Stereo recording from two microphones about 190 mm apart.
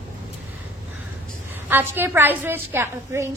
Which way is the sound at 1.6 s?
10° right (ahead or behind).